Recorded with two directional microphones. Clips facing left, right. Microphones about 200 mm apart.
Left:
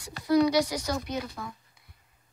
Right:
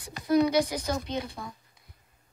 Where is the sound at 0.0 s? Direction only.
20° right (ahead or behind).